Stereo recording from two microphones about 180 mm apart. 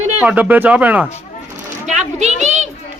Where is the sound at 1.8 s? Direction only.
40° right (ahead or behind).